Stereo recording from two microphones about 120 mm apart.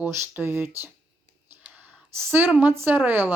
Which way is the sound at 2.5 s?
10° right (ahead or behind).